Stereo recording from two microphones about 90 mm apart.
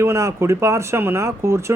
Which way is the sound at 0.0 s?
35° right (ahead or behind).